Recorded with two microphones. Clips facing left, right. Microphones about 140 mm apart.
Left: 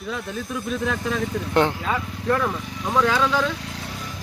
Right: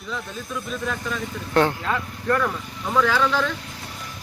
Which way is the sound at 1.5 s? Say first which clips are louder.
Right 1 dB; 15° left (ahead or behind).